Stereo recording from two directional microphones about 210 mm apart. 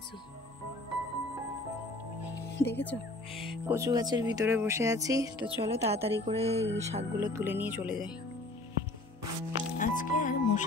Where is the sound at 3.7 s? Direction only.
15° right (ahead or behind).